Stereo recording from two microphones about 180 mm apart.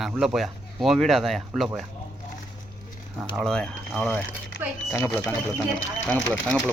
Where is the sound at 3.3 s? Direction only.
5° left (ahead or behind).